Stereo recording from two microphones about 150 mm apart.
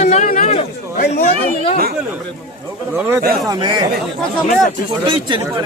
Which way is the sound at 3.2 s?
85° right.